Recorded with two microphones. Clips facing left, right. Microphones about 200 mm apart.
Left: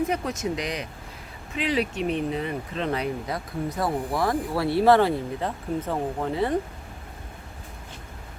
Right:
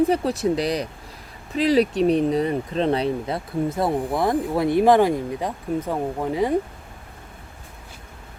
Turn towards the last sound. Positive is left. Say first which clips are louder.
# right 3 dB
turn(degrees=-10)  # may be behind; listen again after turning